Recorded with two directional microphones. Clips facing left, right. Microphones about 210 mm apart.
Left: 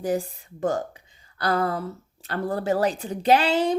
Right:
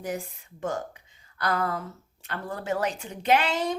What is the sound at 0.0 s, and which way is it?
Speech, 35° left (ahead or behind).